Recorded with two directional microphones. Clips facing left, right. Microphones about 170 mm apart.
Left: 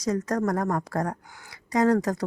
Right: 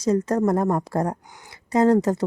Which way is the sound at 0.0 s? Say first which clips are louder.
Right 5 dB; 30° right (ahead or behind).